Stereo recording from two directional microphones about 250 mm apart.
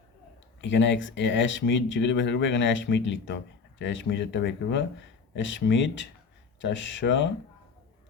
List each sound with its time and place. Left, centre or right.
0.6 s speech: left